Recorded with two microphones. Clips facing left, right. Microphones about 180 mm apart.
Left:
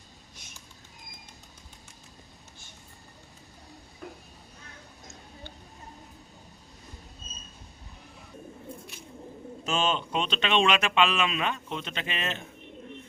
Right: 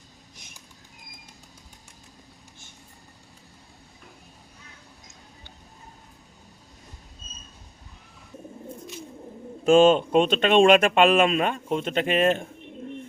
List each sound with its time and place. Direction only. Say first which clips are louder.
9.6 s speech: right 13 dB; 50° right (ahead or behind)